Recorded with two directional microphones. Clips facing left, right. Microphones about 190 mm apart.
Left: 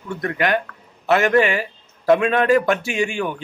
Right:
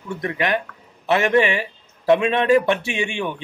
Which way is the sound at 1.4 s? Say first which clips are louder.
Left 1 dB; 40° left (ahead or behind).